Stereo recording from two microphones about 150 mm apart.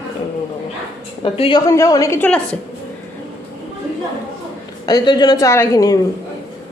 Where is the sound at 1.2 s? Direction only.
35° left (ahead or behind).